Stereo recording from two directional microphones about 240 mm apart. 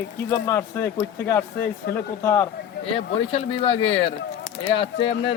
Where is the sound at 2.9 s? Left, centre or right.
Left.